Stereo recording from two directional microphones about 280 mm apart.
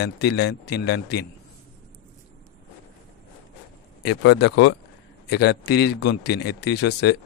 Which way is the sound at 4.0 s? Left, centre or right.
Left.